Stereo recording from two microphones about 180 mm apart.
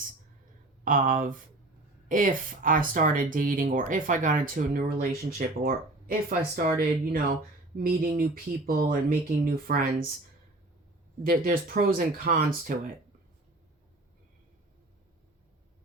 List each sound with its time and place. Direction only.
0.9 s speech: 45° right (ahead or behind)
11.2 s speech: 50° right (ahead or behind)